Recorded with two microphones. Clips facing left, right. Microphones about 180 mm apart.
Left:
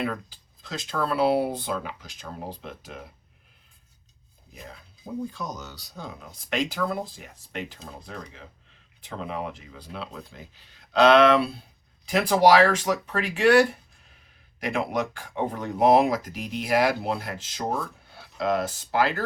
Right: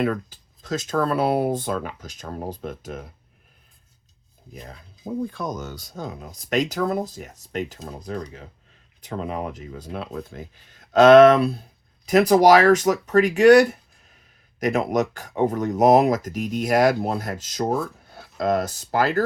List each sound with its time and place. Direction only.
0.0 s speech: 45° right (ahead or behind)
5.3 s speech: 55° right (ahead or behind)
14.6 s speech: 45° right (ahead or behind)